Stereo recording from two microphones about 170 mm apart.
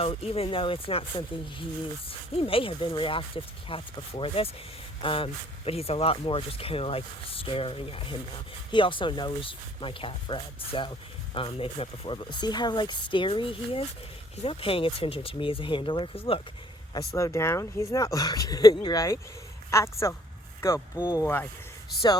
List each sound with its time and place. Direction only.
0.0 s speech: 35° left (ahead or behind)
17.2 s speech: 15° left (ahead or behind)